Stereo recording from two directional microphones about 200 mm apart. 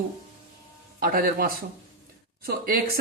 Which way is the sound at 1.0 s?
45° right (ahead or behind).